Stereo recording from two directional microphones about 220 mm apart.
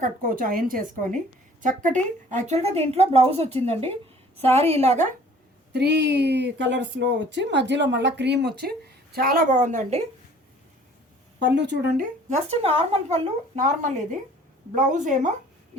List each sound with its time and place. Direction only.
0.0 s a woman's voice: 40° right (ahead or behind)
5.7 s speech: 50° right (ahead or behind); by 10.0 s 35° right (ahead or behind)
11.3 s speech: 55° right (ahead or behind)
12.3 s a woman's voice: 25° right (ahead or behind)